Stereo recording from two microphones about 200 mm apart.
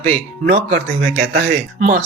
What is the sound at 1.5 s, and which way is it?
Speech, 40° right (ahead or behind).